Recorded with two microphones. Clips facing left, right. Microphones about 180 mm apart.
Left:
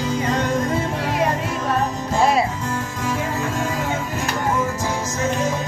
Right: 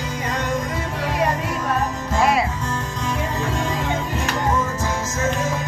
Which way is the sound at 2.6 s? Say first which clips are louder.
Left 1 dB; 10° left (ahead or behind).